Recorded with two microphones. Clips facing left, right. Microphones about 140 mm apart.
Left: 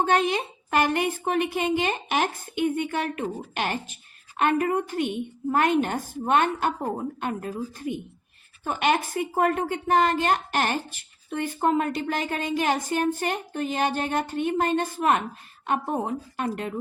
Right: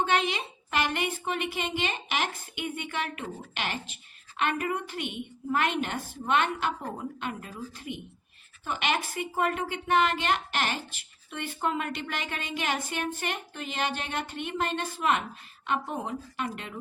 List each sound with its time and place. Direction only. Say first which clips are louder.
0.0 s a woman's voice: left 5 dB; 45° left (ahead or behind)